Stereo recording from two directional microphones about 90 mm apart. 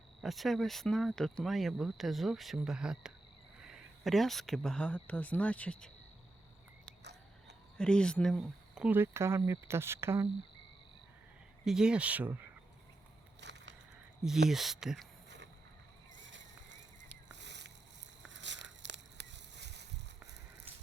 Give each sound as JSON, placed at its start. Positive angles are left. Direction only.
{"t": 0.2, "sound": "speech", "side_deg": 0}
{"t": 7.8, "sound": "speech", "side_deg": 10}
{"t": 8.9, "sound": "speech", "side_deg": -30}
{"t": 11.6, "sound": "speech", "side_deg": -5}
{"t": 14.3, "sound": "speech", "side_deg": -5}